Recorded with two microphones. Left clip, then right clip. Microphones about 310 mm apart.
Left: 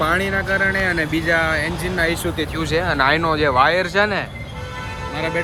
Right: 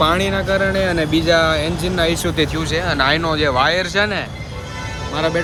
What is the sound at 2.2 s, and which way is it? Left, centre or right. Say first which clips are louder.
Speech: right 5 dB; right.